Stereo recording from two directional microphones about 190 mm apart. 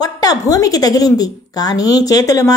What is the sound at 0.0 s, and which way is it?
A woman's voice, 20° left (ahead or behind).